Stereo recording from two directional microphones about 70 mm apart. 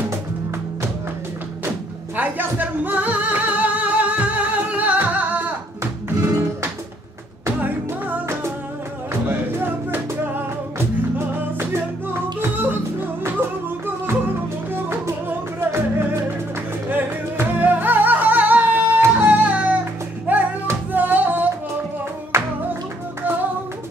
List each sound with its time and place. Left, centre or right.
2.1 s music: right
6.0 s music: right
9.3 s music: right
14.7 s music: right
16.9 s flamenco: right
20.9 s music: right
22.3 s music: right